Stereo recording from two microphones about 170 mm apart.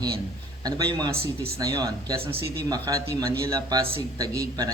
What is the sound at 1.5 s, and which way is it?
Speech, 20° right (ahead or behind).